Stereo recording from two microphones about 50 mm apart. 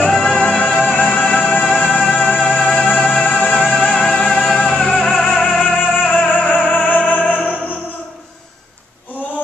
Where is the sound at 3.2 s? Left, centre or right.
Left.